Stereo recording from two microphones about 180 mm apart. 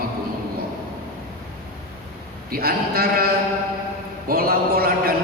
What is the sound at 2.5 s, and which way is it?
Speech, 55° right (ahead or behind).